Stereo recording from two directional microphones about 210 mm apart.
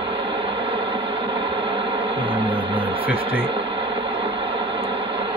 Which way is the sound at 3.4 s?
25° right (ahead or behind).